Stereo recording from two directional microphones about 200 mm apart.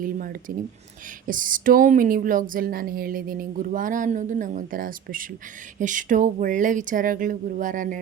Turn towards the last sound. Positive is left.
turn(degrees=-40)  # may be behind; listen again after turning